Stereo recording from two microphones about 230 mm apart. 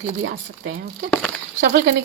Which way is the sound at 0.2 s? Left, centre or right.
Right.